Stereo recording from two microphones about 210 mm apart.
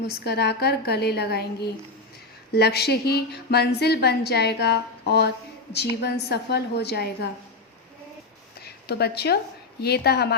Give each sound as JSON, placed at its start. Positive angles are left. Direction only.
{"t": 0.3, "sound": "speech", "side_deg": 50}
{"t": 8.6, "sound": "speech", "side_deg": 50}